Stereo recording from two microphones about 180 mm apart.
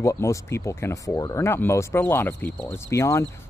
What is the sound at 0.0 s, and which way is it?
Speech, 15° left (ahead or behind).